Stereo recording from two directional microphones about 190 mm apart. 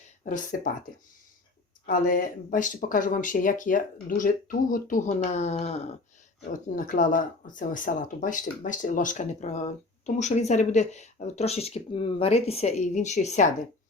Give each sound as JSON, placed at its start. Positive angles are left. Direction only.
{"t": 0.2, "sound": "speech", "side_deg": 40}
{"t": 1.9, "sound": "speech", "side_deg": 45}